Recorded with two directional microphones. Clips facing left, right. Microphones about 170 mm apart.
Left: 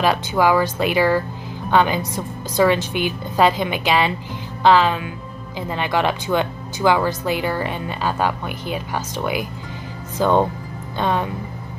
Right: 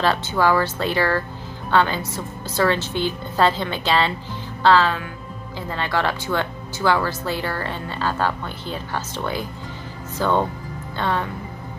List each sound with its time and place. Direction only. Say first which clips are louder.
0.0 s speech: left 2 dB; 15° left (ahead or behind)